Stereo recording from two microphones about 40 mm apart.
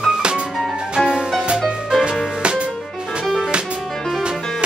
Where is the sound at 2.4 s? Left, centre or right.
Right.